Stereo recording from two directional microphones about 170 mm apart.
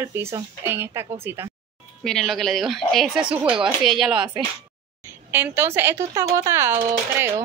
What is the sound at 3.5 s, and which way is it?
Speech, 30° right (ahead or behind).